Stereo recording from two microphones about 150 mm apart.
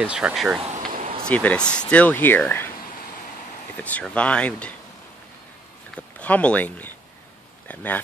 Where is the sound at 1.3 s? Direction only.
10° left (ahead or behind).